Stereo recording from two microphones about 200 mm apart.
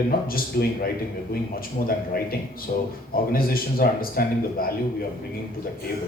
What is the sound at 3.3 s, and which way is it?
Speech, 50° left (ahead or behind).